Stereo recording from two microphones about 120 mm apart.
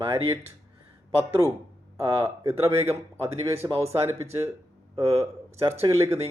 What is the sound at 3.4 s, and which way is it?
Speech, 25° right (ahead or behind).